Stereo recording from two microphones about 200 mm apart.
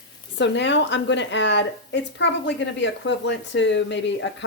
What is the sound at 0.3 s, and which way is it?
A woman's voice, 60° left (ahead or behind).